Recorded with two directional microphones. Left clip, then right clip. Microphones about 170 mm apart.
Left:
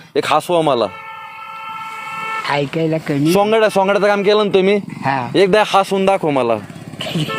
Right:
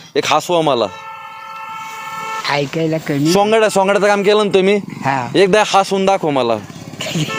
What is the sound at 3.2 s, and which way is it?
Speech, 10° right (ahead or behind).